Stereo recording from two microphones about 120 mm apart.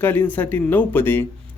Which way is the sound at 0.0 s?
15° left (ahead or behind).